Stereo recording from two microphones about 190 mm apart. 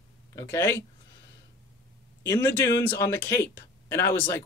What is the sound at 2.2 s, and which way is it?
Speech, 15° left (ahead or behind).